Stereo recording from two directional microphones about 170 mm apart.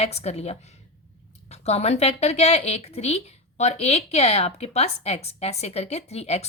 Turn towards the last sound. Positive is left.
turn(degrees=40)  # may be behind; listen again after turning